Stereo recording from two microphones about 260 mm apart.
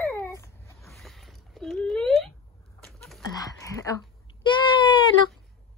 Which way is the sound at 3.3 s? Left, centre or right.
Centre.